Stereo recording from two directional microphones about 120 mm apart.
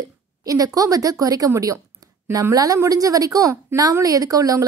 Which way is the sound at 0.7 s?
30° right (ahead or behind).